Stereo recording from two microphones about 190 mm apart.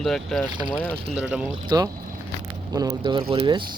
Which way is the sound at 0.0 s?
Centre (ahead or behind).